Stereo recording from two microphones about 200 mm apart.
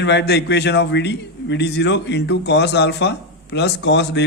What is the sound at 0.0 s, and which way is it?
A man's voice, 60° left (ahead or behind).